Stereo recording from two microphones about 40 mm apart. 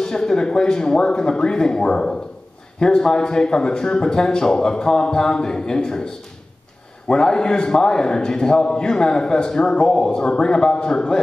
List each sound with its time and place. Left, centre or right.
0.0 s a man's voice: centre